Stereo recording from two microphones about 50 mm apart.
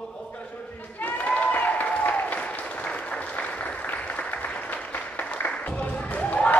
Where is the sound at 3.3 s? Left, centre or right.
Left.